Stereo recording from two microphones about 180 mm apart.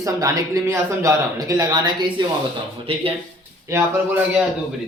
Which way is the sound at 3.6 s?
10° right (ahead or behind).